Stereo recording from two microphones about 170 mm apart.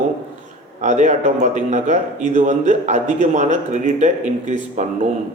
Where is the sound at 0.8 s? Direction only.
45° right (ahead or behind).